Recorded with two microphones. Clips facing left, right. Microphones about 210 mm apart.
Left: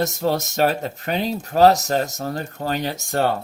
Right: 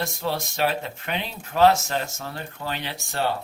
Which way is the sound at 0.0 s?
45° left (ahead or behind).